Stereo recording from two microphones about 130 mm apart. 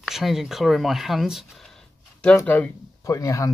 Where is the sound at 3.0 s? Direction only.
25° left (ahead or behind).